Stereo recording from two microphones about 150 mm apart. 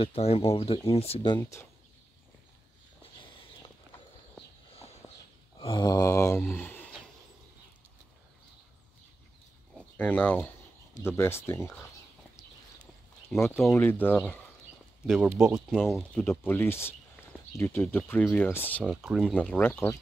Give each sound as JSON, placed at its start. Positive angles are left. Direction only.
{"t": 0.0, "sound": "speech", "side_deg": 40}
{"t": 1.4, "sound": "speech", "side_deg": 15}
{"t": 5.0, "sound": "a sound", "side_deg": 5}
{"t": 5.6, "sound": "mantra", "side_deg": 30}
{"t": 9.9, "sound": "speech", "side_deg": 10}
{"t": 13.3, "sound": "speech", "side_deg": 5}
{"t": 15.0, "sound": "speech", "side_deg": 0}
{"t": 16.2, "sound": "speech", "side_deg": 15}
{"t": 18.9, "sound": "speech", "side_deg": 0}